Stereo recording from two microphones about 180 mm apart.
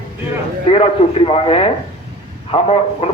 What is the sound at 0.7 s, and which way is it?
A man's voice, 35° left (ahead or behind).